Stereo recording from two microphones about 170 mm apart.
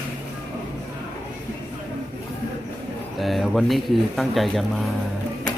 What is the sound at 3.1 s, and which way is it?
Speech, centre (ahead or behind).